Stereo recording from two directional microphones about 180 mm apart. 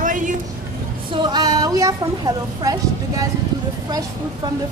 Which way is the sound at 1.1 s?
25° right (ahead or behind).